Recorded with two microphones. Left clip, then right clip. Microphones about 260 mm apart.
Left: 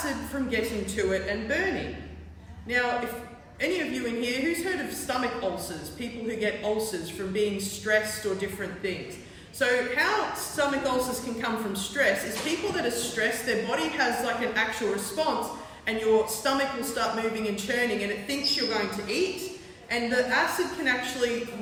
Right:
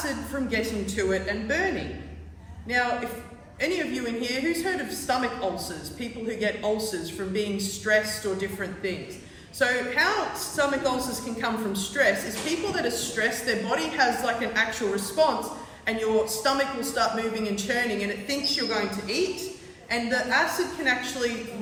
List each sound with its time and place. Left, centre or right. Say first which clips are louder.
0.5 s a woman's voice: even; centre
3.6 s a woman's voice: right 1 dB; centre